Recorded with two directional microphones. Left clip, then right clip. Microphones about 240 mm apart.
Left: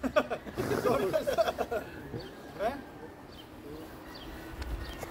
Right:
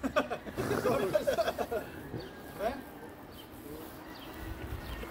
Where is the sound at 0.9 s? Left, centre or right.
Centre.